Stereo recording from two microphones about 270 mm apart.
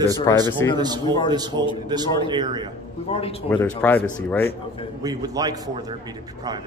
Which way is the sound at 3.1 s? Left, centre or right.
Left.